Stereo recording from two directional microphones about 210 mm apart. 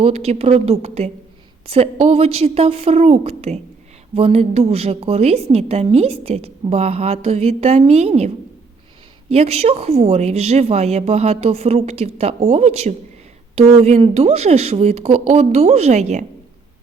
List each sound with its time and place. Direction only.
0.0 s a woman's voice: 30° right (ahead or behind)
9.3 s a woman's voice: 30° right (ahead or behind)